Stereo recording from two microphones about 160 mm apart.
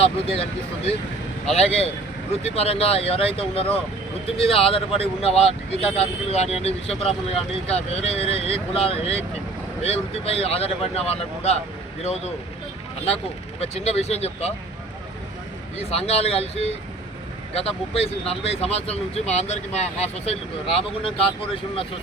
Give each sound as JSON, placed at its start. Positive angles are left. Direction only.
{"t": 0.0, "sound": "speech", "side_deg": 40}
{"t": 1.5, "sound": "speech", "side_deg": 40}
{"t": 13.6, "sound": "speech", "side_deg": 40}
{"t": 15.8, "sound": "speech", "side_deg": 40}